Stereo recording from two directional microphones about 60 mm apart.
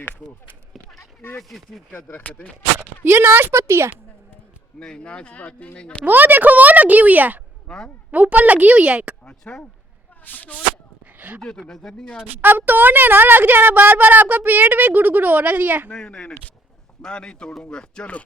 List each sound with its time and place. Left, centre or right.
1.4 s speech: centre
2.2 s speech: left
3.0 s speech: right
3.5 s a woman's voice: right
4.8 s speech: centre
6.1 s speech: right
7.7 s speech: centre
8.1 s speech: right
9.2 s speech: centre
11.0 s a sound: right
11.7 s speech: centre
12.0 s speech: centre
12.4 s speech: right
15.9 s speech: centre